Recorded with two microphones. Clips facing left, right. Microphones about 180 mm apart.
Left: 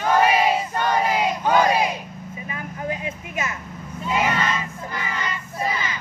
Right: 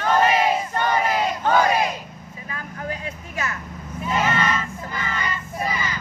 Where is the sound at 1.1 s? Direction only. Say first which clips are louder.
Even; 15° left (ahead or behind).